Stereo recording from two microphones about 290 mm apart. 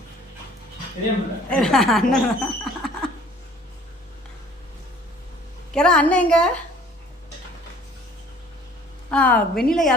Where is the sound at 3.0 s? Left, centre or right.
Centre.